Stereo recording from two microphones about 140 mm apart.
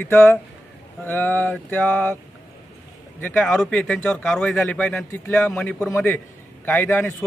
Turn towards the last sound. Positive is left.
turn(degrees=15)  # may be behind; listen again after turning